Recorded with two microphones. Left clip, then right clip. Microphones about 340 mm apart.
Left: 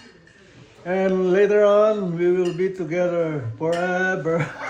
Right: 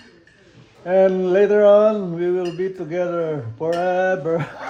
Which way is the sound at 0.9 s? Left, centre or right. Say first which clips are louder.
Right 4 dB; right.